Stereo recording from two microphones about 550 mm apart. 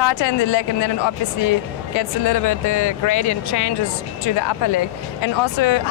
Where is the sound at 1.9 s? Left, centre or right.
Left.